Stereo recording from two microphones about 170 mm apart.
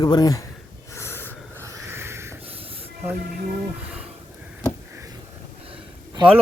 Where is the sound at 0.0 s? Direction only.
20° left (ahead or behind).